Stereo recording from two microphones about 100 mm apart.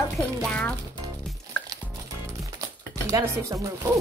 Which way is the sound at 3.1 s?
30° right (ahead or behind).